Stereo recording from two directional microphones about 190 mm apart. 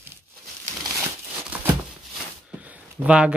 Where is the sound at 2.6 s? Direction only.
10° right (ahead or behind).